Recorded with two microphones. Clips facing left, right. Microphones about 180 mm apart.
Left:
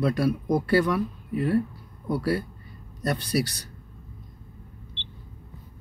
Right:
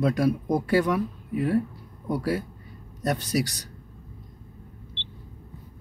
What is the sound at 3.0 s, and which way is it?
Speech, 15° right (ahead or behind).